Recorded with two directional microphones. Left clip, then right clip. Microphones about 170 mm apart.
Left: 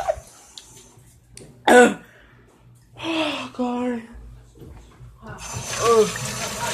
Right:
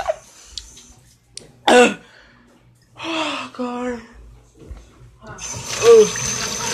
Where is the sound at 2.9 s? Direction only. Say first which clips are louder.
Right 1 dB; 15° left (ahead or behind).